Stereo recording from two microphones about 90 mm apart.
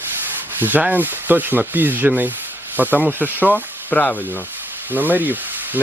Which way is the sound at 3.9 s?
20° left (ahead or behind).